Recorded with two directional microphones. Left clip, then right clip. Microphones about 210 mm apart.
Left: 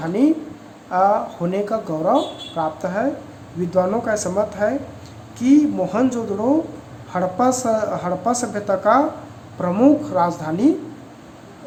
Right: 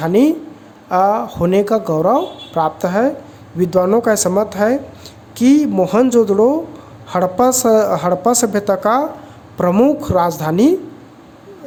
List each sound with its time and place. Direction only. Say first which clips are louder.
0.0 s speech: right 5 dB; 50° right (ahead or behind)